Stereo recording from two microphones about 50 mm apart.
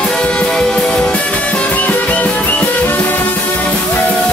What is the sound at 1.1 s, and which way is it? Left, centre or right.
Music, left.